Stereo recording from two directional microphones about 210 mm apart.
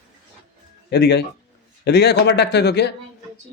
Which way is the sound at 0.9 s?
50° left (ahead or behind).